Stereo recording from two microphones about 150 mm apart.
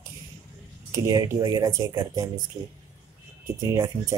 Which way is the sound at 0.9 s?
25° right (ahead or behind).